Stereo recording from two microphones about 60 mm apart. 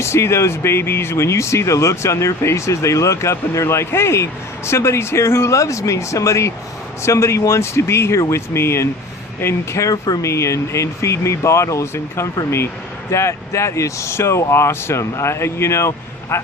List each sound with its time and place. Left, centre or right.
0.0 s speech: left
9.8 s speech: left